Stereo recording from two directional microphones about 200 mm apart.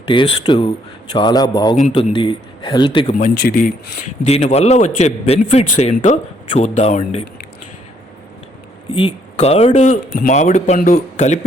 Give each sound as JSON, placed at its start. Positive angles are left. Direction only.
{"t": 0.1, "sound": "a man's voice", "side_deg": 25}
{"t": 3.1, "sound": "speech", "side_deg": 40}
{"t": 9.0, "sound": "speech", "side_deg": 30}